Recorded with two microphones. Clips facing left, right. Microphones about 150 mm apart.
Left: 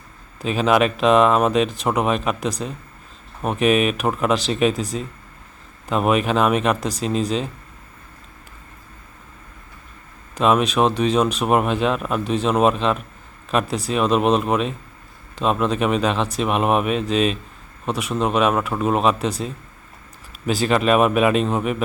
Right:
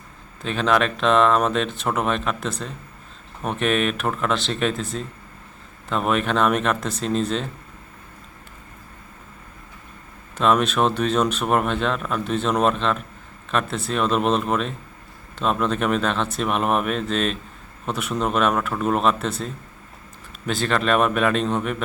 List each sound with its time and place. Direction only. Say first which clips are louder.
0.4 s speech: left 3 dB; 10° left (ahead or behind)
3.4 s speech: left 4 dB; 5° left (ahead or behind)
5.9 s speech: left 3 dB; 5° left (ahead or behind)
6.7 s speech: left 2 dB; 35° left (ahead or behind)
7.0 s speech: left 1 dB; 5° left (ahead or behind)
10.4 s speech: left 2 dB; 5° left (ahead or behind)
20.5 s speech: left 4 dB; 5° left (ahead or behind)